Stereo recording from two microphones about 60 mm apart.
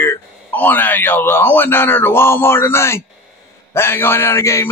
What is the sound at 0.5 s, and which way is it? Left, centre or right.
Speech, left.